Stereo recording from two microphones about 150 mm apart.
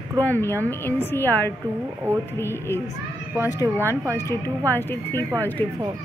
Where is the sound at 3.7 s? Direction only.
15° right (ahead or behind).